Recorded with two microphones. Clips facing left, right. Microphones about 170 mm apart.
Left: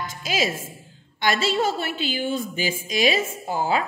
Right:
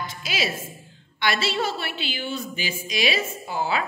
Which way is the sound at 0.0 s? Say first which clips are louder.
Left 3 dB; 45° left (ahead or behind).